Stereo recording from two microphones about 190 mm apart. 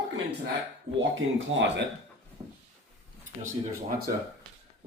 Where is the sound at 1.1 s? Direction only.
75° right (ahead or behind).